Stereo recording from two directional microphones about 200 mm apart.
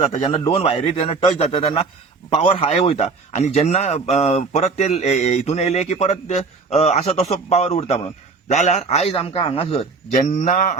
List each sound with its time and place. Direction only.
0.2 s a man's voice: 20° left (ahead or behind); by 10.8 s 40° left (ahead or behind)